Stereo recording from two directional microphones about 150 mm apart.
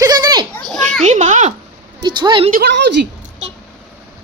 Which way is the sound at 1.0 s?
55° right (ahead or behind).